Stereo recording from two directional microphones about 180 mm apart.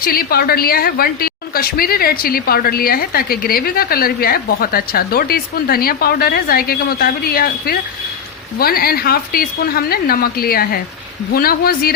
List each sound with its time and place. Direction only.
0.0 s a woman's voice: 55° left (ahead or behind)